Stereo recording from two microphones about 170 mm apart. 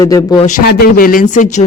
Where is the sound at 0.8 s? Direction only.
55° left (ahead or behind).